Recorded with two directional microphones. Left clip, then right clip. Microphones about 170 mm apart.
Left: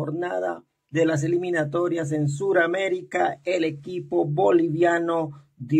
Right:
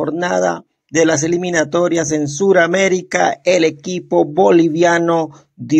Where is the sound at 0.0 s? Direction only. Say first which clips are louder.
Right 11 dB; 45° right (ahead or behind).